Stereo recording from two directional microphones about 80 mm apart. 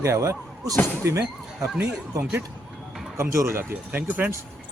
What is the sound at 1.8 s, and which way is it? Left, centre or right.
Speech, right.